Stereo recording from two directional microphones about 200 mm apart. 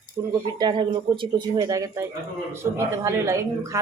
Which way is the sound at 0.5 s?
25° right (ahead or behind).